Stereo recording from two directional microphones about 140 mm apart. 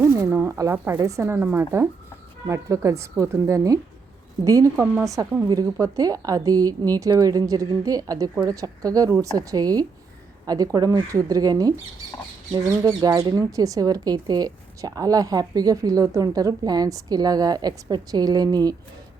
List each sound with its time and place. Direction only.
0.0 s speech: 15° right (ahead or behind)